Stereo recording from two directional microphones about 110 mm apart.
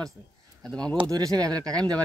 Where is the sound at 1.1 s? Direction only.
35° right (ahead or behind).